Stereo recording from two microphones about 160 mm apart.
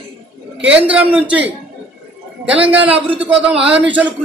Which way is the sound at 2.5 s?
10° right (ahead or behind).